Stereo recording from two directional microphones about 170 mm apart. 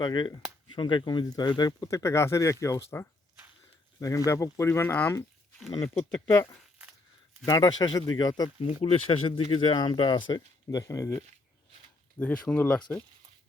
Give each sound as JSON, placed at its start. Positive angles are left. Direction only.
{"t": 0.0, "sound": "speech", "side_deg": 25}
{"t": 7.4, "sound": "speech", "side_deg": 25}
{"t": 12.2, "sound": "speech", "side_deg": 10}